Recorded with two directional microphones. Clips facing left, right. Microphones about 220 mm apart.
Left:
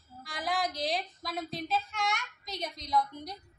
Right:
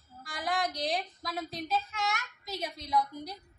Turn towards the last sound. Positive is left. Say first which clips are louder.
# even
turn(degrees=-5)  # may be behind; listen again after turning